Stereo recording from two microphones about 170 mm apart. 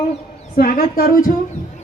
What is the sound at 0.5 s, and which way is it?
Music, 60° left (ahead or behind).